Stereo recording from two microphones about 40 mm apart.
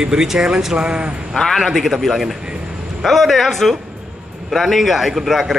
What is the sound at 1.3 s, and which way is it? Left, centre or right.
Speech, centre.